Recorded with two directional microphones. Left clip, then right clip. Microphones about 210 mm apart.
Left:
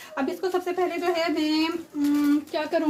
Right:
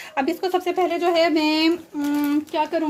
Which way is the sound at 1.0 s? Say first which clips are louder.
Right 9 dB; 45° right (ahead or behind).